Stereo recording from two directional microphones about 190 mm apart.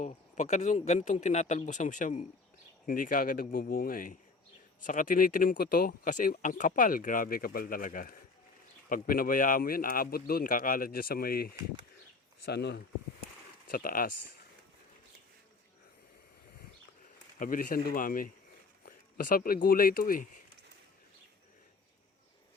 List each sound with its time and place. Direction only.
0.0 s speech: 35° left (ahead or behind); by 12.8 s 60° left (ahead or behind)
13.7 s speech: 50° left (ahead or behind)
17.4 s speech: 45° left (ahead or behind)